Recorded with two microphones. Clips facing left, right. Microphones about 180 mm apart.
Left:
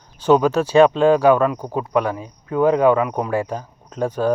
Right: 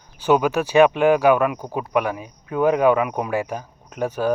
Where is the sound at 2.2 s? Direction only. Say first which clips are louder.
Left 2 dB; 25° left (ahead or behind).